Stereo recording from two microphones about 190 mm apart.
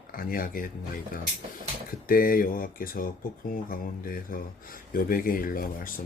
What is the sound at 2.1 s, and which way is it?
Speech, 50° left (ahead or behind).